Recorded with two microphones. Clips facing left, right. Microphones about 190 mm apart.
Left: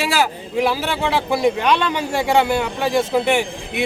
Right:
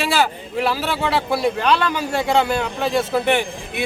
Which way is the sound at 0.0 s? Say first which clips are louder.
Even; 10° left (ahead or behind).